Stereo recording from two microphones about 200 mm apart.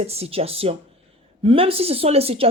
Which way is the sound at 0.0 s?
30° right (ahead or behind).